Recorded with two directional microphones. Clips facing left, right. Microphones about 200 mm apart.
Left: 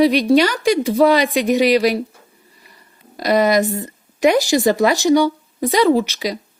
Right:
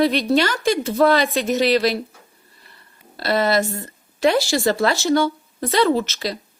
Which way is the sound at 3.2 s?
15° left (ahead or behind).